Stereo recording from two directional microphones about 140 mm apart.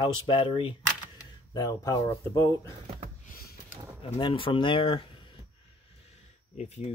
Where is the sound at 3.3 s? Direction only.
90° left.